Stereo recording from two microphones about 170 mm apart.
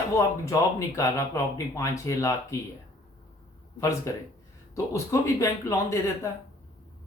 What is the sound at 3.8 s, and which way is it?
Speech, 15° left (ahead or behind).